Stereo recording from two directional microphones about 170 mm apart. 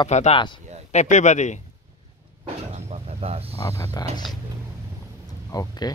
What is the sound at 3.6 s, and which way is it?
Speech, 15° left (ahead or behind).